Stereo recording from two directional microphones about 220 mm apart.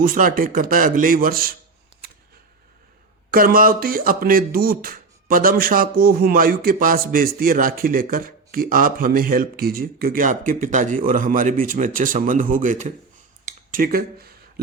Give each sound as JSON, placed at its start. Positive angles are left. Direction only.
{"t": 0.0, "sound": "speech", "side_deg": -40}
{"t": 3.3, "sound": "speech", "side_deg": -40}